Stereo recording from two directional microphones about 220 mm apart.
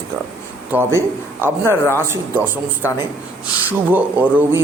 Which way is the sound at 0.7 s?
10° right (ahead or behind).